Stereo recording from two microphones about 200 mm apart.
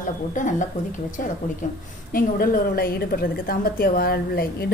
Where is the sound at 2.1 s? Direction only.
45° left (ahead or behind).